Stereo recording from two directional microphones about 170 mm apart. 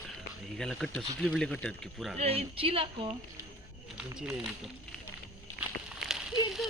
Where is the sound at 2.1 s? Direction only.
35° right (ahead or behind).